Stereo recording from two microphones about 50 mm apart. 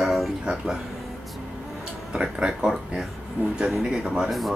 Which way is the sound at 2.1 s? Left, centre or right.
Centre.